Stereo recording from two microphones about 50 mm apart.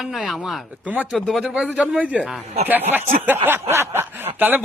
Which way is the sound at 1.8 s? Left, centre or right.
Right.